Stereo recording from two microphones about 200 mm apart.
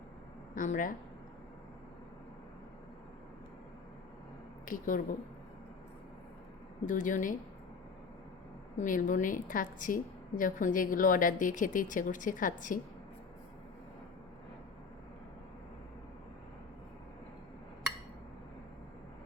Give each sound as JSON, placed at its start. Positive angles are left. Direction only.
{"t": 0.5, "sound": "a woman's voice", "side_deg": 40}
{"t": 4.6, "sound": "a woman's voice", "side_deg": 45}
{"t": 6.8, "sound": "a woman's voice", "side_deg": 40}
{"t": 8.8, "sound": "a woman's voice", "side_deg": 40}